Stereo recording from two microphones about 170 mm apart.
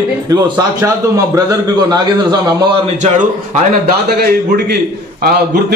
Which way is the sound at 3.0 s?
45° right (ahead or behind).